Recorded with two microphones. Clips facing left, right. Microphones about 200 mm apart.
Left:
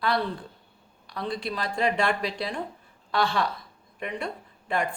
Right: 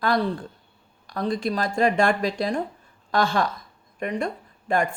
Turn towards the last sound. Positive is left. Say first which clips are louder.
# right 5 dB
turn(degrees=-45)  # may be behind; listen again after turning